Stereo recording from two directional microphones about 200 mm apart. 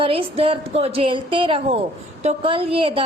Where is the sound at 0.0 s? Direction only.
25° right (ahead or behind).